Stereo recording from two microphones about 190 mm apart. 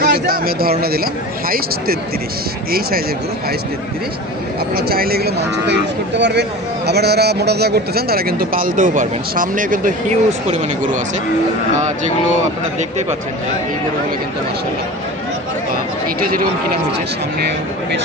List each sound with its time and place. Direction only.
0.0 s speech: 55° right (ahead or behind)
4.7 s speech: 55° right (ahead or behind)
16.2 s speech: 50° right (ahead or behind)